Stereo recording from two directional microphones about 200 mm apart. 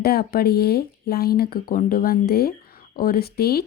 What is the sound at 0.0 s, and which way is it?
A woman's voice, 50° left (ahead or behind).